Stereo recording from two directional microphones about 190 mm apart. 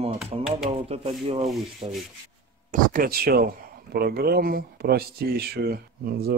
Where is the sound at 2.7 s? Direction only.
50° right (ahead or behind).